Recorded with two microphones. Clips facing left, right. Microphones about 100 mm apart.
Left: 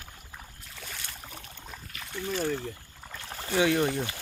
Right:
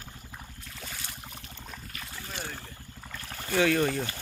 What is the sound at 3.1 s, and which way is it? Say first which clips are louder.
Boat: left 1 dB; 15° left (ahead or behind).